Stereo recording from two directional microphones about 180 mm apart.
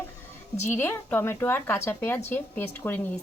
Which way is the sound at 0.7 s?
10° left (ahead or behind).